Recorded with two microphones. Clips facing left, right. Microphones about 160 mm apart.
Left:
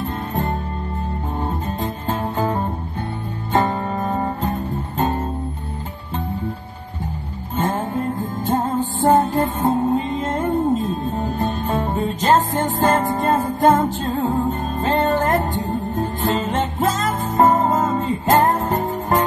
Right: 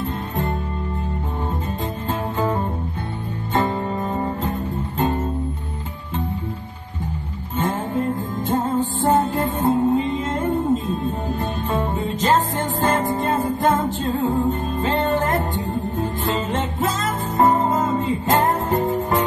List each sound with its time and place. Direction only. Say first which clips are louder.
0.0 s music: left 1 dB; 35° left (ahead or behind)
2.0 s music: left 1 dB; 35° left (ahead or behind)
3.5 s guitar: left 2 dB; 40° left (ahead or behind)
7.5 s music: left 1 dB; 35° left (ahead or behind)